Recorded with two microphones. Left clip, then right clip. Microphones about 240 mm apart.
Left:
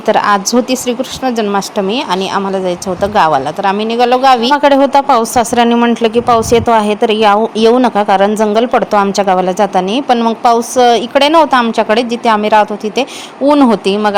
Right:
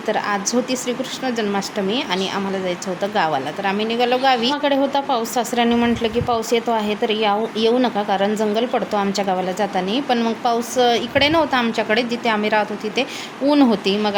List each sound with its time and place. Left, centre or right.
0.1 s speech: left